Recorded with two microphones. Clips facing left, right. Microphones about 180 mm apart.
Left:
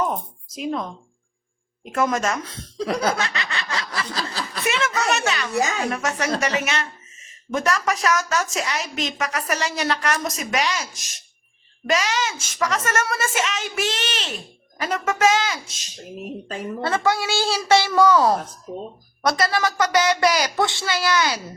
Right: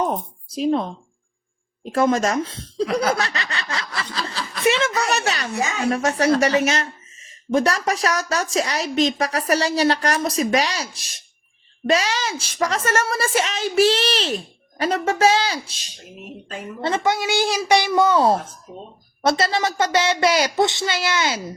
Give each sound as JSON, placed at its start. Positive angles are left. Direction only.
{"t": 0.0, "sound": "a woman's voice", "side_deg": -30}
{"t": 4.1, "sound": "snicker", "side_deg": 35}
{"t": 4.6, "sound": "a child's voice", "side_deg": -30}
{"t": 16.8, "sound": "a woman's voice", "side_deg": -20}